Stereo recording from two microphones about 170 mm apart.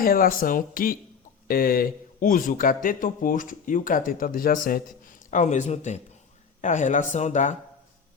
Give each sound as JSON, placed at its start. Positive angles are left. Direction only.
{"t": 0.0, "sound": "a man's voice", "side_deg": 55}
{"t": 5.3, "sound": "speech", "side_deg": 45}